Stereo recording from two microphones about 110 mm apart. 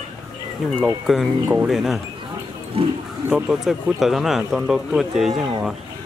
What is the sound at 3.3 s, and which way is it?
Speech, 10° right (ahead or behind).